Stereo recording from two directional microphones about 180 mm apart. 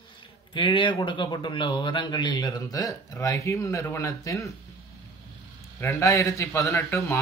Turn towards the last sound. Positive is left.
turn(degrees=15)  # may be behind; listen again after turning